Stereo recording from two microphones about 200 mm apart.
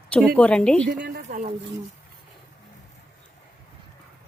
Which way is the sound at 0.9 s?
55° right (ahead or behind).